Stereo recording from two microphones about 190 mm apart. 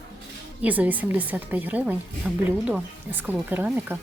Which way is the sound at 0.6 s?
10° right (ahead or behind).